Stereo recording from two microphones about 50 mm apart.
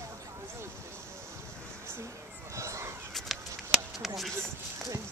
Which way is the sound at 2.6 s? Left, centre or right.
Right.